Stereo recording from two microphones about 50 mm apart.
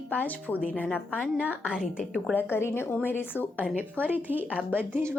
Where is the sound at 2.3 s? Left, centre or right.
Left.